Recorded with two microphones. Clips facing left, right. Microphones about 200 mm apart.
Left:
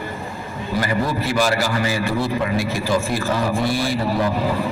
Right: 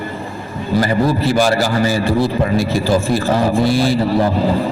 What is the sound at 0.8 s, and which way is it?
A man's voice, 30° right (ahead or behind).